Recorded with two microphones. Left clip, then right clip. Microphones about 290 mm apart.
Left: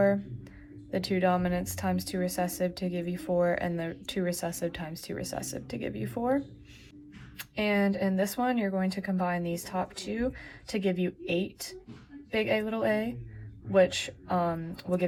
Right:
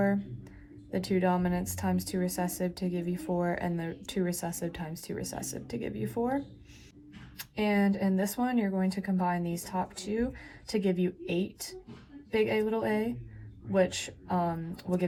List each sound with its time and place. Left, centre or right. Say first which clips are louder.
0.9 s speech: left 2 dB; centre